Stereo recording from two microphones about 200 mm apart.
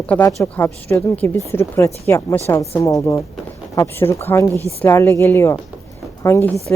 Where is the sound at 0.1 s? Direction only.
10° left (ahead or behind).